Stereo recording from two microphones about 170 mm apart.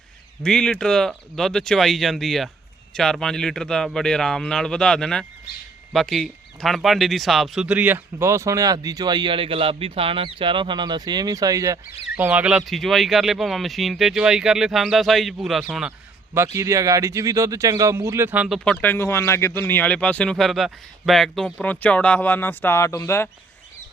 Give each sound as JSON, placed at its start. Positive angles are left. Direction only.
{"t": 0.4, "sound": "speech", "side_deg": 5}
{"t": 12.1, "sound": "speech", "side_deg": -10}
{"t": 16.6, "sound": "speech", "side_deg": -15}